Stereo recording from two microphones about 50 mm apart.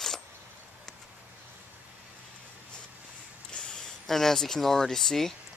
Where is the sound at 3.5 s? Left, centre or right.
Centre.